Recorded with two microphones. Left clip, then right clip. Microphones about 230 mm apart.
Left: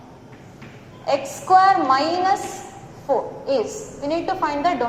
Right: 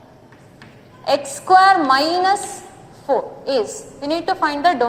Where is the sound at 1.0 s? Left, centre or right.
Right.